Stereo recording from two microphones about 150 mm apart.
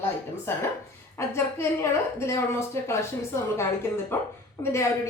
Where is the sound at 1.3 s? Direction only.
15° left (ahead or behind).